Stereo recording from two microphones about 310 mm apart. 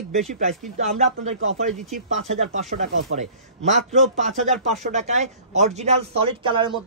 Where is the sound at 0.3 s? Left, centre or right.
Right.